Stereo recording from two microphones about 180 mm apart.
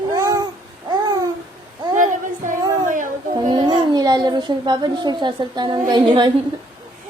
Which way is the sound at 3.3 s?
25° right (ahead or behind).